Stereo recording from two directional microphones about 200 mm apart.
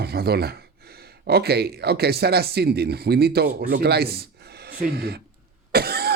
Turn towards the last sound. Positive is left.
turn(degrees=-50)  # may be behind; listen again after turning